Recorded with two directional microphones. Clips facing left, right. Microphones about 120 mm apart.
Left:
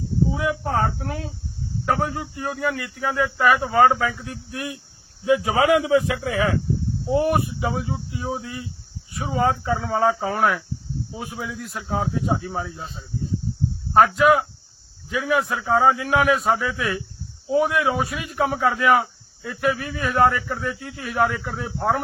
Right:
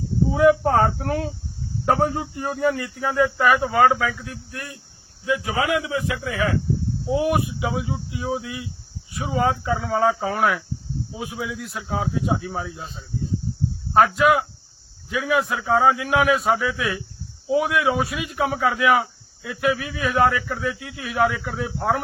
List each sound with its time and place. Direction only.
0.3 s speech: 50° right (ahead or behind)
1.8 s speech: 25° right (ahead or behind)
2.7 s a man's voice: centre (ahead or behind)
3.4 s speech: 20° right (ahead or behind)
3.8 s a man's voice: 10° left (ahead or behind)
5.2 s a man's voice: 25° left (ahead or behind)
7.0 s a man's voice: centre (ahead or behind)
14.0 s a man's voice: centre (ahead or behind)
15.3 s speech: 10° right (ahead or behind)
15.6 s a man's voice: centre (ahead or behind)